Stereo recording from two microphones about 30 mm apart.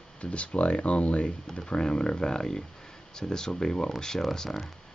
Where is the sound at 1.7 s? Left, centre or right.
Left.